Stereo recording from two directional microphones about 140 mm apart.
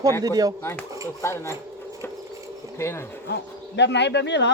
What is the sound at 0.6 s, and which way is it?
Speech, 15° left (ahead or behind).